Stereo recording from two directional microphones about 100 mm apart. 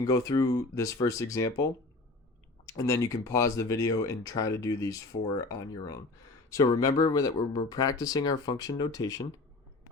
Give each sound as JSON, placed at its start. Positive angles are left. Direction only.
{"t": 0.0, "sound": "speech", "side_deg": 35}
{"t": 2.6, "sound": "speech", "side_deg": 30}